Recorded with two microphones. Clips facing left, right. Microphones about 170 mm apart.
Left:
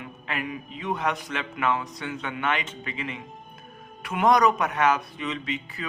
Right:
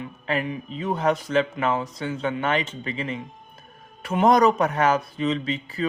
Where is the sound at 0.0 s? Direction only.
35° right (ahead or behind).